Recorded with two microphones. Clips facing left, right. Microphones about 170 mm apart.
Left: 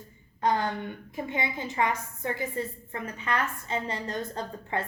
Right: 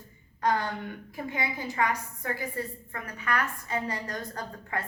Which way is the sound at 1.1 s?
25° left (ahead or behind).